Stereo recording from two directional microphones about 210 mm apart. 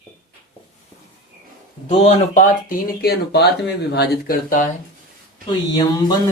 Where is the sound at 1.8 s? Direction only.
35° left (ahead or behind).